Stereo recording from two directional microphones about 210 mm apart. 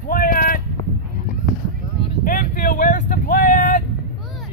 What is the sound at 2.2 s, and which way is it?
Vehicle, 40° left (ahead or behind).